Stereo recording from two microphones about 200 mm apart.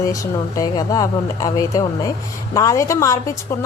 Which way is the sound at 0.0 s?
15° left (ahead or behind).